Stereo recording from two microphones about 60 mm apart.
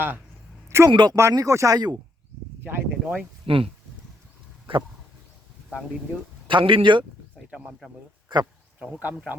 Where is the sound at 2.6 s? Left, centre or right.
Right.